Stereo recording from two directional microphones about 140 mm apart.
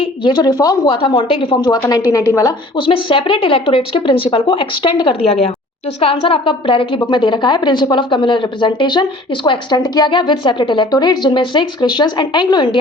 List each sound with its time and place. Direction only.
0.0 s a woman's voice: 35° left (ahead or behind)